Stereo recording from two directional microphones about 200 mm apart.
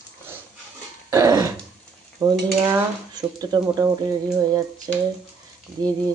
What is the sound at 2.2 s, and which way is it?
Cutlery, 20° right (ahead or behind).